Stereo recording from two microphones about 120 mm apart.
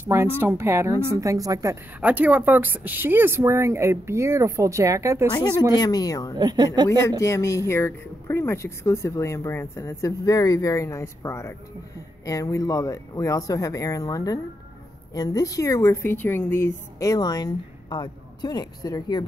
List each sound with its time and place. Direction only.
0.0 s speech: 20° right (ahead or behind)
2.0 s speech: 15° right (ahead or behind)
5.8 s speech: 30° left (ahead or behind)
6.3 s speech: 35° right (ahead or behind)
6.9 s speech: 25° left (ahead or behind)